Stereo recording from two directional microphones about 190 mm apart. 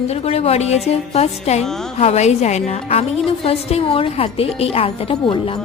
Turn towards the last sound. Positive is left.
turn(degrees=30)  # may be behind; listen again after turning